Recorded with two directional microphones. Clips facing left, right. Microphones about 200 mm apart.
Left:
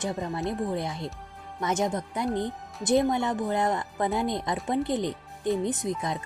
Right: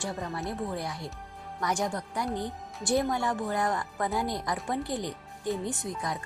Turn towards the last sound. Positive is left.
turn(degrees=20)  # may be behind; listen again after turning